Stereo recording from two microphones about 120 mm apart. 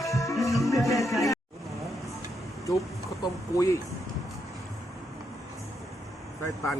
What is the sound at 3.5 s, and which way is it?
Speech, 25° left (ahead or behind).